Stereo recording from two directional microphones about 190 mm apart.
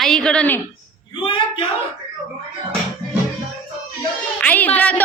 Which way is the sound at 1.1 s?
25° left (ahead or behind).